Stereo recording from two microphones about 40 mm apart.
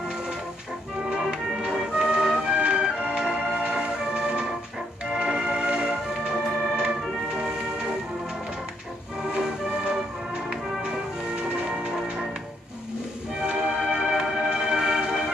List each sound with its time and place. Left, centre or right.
1.1 s music: centre
9.3 s music: right
13.4 s music: right